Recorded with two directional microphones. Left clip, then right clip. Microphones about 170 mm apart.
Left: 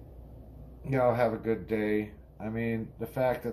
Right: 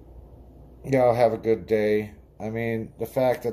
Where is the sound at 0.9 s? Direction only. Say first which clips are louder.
Right 7 dB; 65° right (ahead or behind).